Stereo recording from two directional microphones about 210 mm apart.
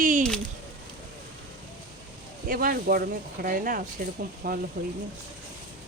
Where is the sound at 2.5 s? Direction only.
40° right (ahead or behind).